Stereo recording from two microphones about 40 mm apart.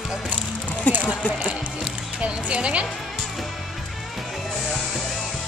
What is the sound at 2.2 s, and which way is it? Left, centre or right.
Speech, right.